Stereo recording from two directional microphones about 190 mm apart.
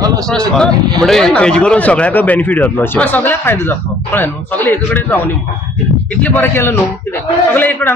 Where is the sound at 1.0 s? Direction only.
5° left (ahead or behind).